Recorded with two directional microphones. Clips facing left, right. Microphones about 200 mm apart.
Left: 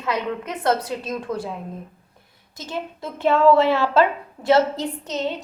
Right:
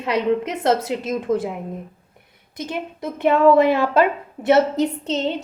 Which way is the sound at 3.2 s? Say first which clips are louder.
Right 2 dB; 15° right (ahead or behind).